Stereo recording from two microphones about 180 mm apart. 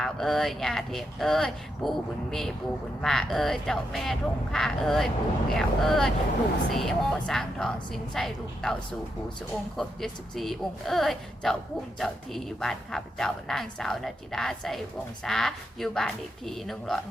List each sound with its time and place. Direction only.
0.0 s speech: centre (ahead or behind)